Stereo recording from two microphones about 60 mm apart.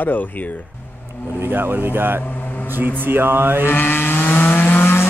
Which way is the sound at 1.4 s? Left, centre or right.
Right.